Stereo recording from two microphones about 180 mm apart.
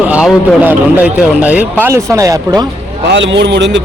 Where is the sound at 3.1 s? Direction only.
85° right.